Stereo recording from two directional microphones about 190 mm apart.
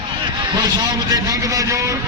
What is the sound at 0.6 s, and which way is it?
A man's voice, 20° right (ahead or behind).